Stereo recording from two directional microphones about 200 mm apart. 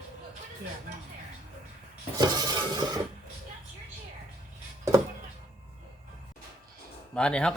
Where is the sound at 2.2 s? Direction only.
20° right (ahead or behind).